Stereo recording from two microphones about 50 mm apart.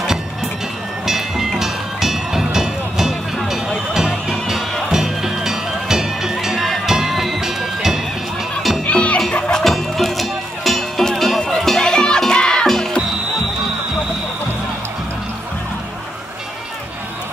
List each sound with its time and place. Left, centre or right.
1.0 s music: centre
8.8 s music: left
9.5 s music: centre